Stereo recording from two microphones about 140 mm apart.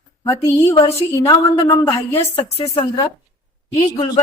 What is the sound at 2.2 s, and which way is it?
Speech, 45° left (ahead or behind).